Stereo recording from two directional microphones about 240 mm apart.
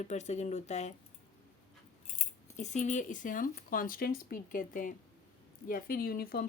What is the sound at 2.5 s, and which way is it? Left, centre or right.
Speech, left.